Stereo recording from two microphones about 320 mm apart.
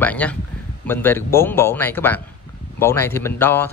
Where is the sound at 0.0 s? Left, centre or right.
Centre.